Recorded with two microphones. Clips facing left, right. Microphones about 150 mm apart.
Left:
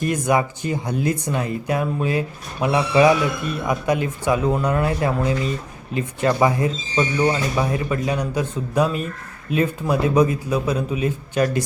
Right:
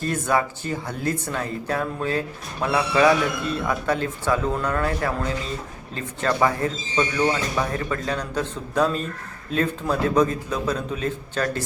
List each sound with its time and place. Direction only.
0.0 s speech: 15° left (ahead or behind)